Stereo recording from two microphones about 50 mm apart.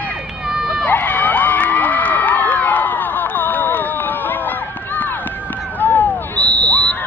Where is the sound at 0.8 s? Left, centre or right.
Left.